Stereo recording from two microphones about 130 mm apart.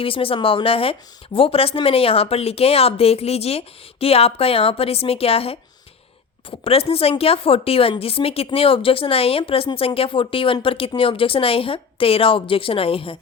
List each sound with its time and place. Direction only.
0.0 s speech: 45° left (ahead or behind)
6.7 s speech: 50° left (ahead or behind)